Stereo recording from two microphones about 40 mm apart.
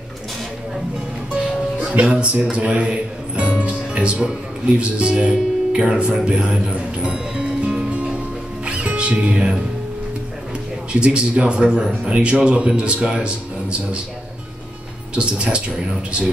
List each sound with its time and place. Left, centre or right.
2.0 s speech: right
7.0 s music: right
10.9 s speech: right
15.1 s speech: right